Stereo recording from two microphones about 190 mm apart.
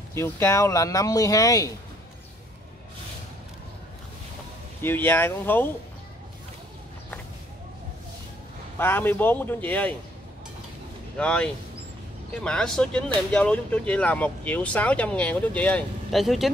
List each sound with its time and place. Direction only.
0.1 s speech: 15° left (ahead or behind)
4.8 s speech: 10° left (ahead or behind)
8.7 s speech: 10° left (ahead or behind)
11.1 s speech: 5° left (ahead or behind)